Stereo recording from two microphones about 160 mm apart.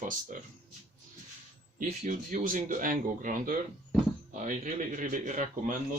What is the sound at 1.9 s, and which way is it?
Speech, 55° right (ahead or behind).